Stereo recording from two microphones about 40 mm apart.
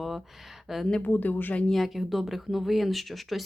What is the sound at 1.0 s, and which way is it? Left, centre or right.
Speech, left.